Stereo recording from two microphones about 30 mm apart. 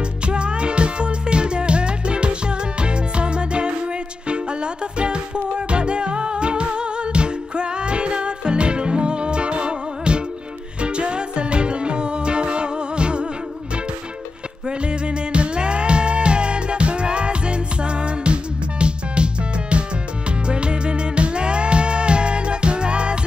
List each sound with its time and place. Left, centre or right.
0.3 s music: right
14.7 s music: right